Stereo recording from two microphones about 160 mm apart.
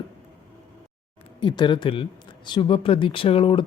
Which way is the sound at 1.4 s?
30° left (ahead or behind).